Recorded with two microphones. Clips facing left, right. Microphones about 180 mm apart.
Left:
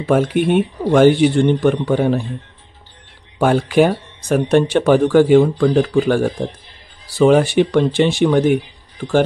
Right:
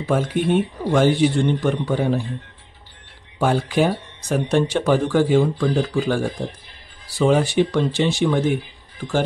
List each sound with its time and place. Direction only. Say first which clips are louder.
0.0 s speech: left 5 dB; 65° left (ahead or behind)
3.3 s speech: left 5 dB; 65° left (ahead or behind)